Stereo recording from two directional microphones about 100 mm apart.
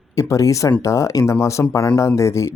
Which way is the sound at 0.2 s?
30° left (ahead or behind).